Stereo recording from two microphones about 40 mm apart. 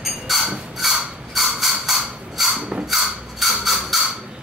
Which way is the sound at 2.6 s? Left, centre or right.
Right.